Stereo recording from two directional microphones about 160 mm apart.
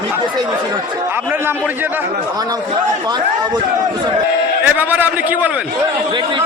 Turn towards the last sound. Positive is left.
turn(degrees=-10)  # may be behind; listen again after turning